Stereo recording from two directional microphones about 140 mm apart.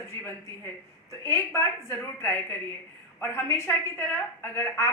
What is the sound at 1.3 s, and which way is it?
A woman's voice, 20° left (ahead or behind).